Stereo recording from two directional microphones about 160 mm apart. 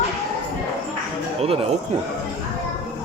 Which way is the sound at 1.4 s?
35° right (ahead or behind).